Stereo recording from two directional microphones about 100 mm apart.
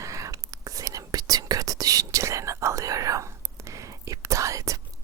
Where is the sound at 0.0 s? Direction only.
35° right (ahead or behind).